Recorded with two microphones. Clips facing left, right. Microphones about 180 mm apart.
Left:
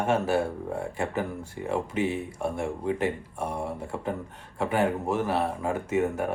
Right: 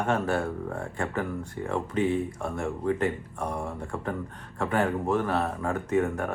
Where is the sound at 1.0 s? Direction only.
25° left (ahead or behind).